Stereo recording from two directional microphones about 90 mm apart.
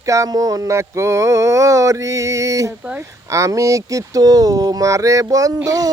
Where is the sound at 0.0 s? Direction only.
35° right (ahead or behind).